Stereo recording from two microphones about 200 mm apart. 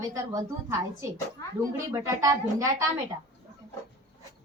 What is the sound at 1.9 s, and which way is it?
Speech, 15° right (ahead or behind).